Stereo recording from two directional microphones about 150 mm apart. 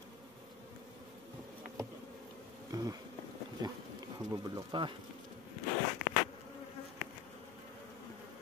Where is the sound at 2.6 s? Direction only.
25° right (ahead or behind).